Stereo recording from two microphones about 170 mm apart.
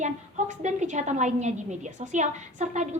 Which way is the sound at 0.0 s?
45° right (ahead or behind).